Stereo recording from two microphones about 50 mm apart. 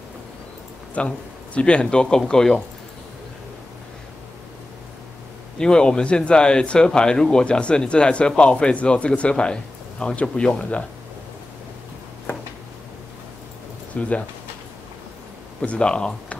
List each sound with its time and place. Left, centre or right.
0.9 s speech: left
5.6 s speech: centre
13.9 s speech: left
15.6 s speech: left